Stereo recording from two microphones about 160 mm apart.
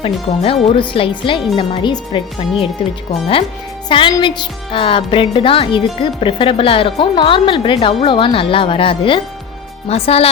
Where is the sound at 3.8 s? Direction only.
30° left (ahead or behind).